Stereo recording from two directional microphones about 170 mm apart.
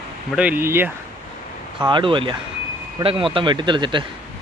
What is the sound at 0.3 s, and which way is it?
Speech, 5° right (ahead or behind).